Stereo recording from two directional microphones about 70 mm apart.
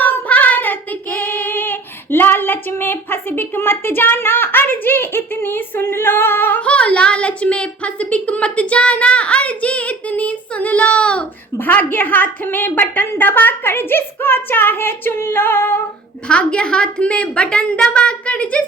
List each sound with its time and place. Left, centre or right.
0.0 s child singing: left
1.2 s female singing: left
6.6 s a woman's voice: centre
16.3 s a woman's voice: centre